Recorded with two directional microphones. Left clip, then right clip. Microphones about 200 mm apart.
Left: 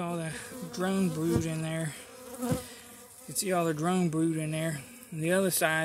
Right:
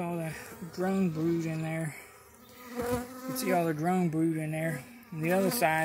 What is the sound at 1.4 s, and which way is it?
Speech, 5° left (ahead or behind).